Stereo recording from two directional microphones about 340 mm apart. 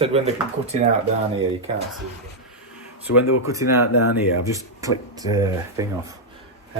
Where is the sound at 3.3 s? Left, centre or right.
Left.